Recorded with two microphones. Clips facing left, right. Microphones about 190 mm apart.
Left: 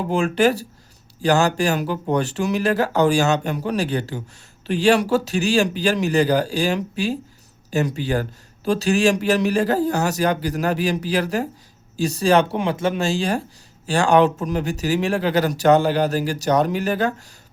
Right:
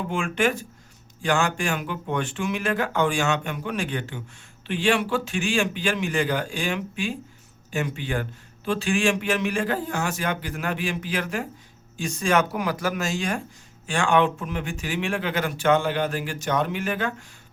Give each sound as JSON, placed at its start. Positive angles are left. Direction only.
{"t": 0.0, "sound": "a man's voice", "side_deg": 35}